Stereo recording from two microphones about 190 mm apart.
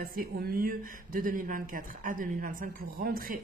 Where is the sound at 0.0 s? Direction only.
50° right (ahead or behind).